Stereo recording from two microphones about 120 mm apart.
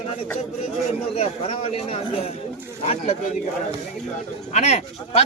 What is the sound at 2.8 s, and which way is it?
Speech, 70° left (ahead or behind).